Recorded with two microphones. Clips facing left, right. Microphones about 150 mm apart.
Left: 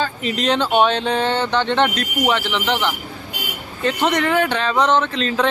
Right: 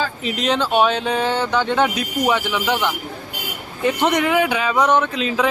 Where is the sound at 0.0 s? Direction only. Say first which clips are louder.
Left 1 dB; 5° right (ahead or behind).